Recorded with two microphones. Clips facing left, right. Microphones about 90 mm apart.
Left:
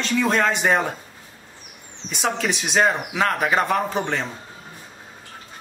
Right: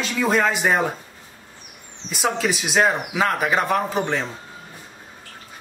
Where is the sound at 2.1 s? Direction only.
5° right (ahead or behind).